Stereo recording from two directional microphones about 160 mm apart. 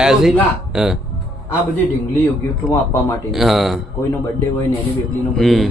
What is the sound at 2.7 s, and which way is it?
Speech, 20° left (ahead or behind).